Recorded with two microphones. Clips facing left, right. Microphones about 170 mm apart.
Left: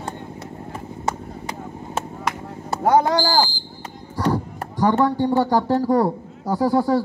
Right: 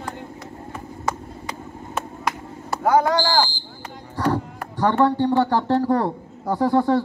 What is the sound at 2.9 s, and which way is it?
Speech, 25° left (ahead or behind).